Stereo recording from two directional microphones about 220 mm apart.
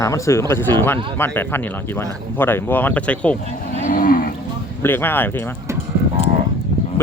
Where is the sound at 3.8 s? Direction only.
40° left (ahead or behind).